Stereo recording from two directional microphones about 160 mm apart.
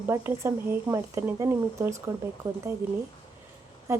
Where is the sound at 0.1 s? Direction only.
15° right (ahead or behind).